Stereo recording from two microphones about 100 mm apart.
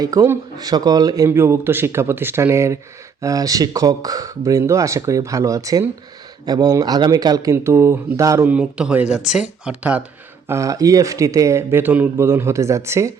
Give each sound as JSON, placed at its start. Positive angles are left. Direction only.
{"t": 0.0, "sound": "speech", "side_deg": -35}
{"t": 7.5, "sound": "speech", "side_deg": -25}
{"t": 8.4, "sound": "speech", "side_deg": -15}
{"t": 10.5, "sound": "speech", "side_deg": -35}